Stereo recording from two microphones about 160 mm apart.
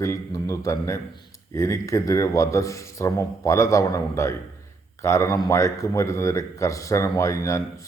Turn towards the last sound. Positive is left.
turn(degrees=20)  # may be behind; listen again after turning